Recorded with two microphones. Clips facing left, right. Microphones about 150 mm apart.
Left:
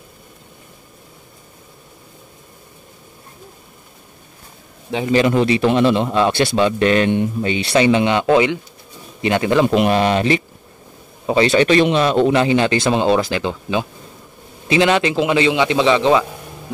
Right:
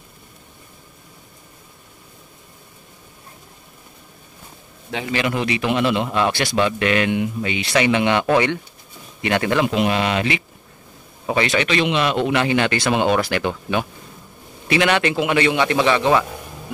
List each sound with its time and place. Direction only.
4.9 s a man's voice: 30° left (ahead or behind)
9.7 s speech: 45° left (ahead or behind)
11.2 s a man's voice: 30° left (ahead or behind)